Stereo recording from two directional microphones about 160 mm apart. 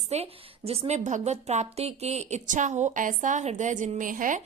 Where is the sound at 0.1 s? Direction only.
40° right (ahead or behind).